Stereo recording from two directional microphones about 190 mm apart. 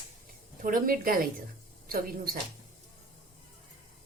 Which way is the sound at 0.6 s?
45° right (ahead or behind).